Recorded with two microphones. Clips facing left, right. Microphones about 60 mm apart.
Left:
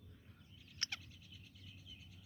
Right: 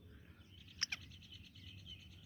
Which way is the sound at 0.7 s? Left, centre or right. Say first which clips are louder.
Right 1 dB; right.